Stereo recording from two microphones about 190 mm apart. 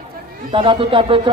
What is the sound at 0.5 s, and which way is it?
Speech, 25° right (ahead or behind).